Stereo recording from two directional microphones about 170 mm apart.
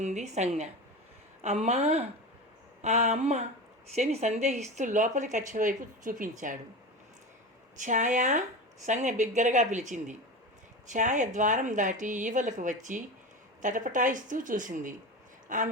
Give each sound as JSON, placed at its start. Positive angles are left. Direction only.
{"t": 0.0, "sound": "a woman's voice", "side_deg": -45}
{"t": 7.8, "sound": "speech", "side_deg": -45}